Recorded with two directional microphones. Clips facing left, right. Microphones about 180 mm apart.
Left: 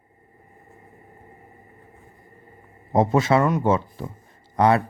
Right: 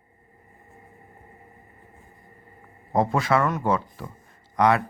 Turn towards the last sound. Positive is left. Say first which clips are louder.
# left 2 dB
turn(degrees=30)  # may be behind; listen again after turning